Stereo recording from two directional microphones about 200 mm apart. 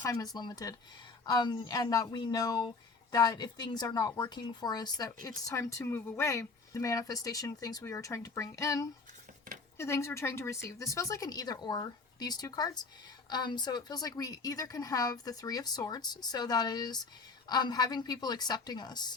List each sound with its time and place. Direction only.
0.0 s speech: 15° left (ahead or behind)